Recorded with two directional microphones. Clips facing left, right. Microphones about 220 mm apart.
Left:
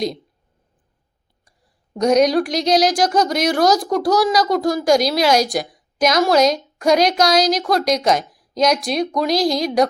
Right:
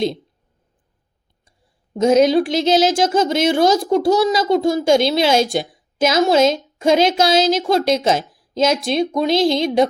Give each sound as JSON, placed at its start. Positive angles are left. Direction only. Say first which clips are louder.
{"t": 1.5, "sound": "whispering", "louder": "even", "side_deg": -25}
{"t": 2.1, "sound": "speech", "louder": "right 2 dB", "side_deg": -25}
{"t": 8.2, "sound": "a sound", "louder": "right 2 dB", "side_deg": 0}
{"t": 8.6, "sound": "speech", "louder": "even", "side_deg": -25}
{"t": 9.5, "sound": "a woman's voice", "louder": "right 2 dB", "side_deg": 0}